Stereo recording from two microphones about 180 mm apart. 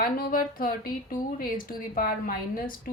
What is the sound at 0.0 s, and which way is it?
A woman's voice, 55° left (ahead or behind).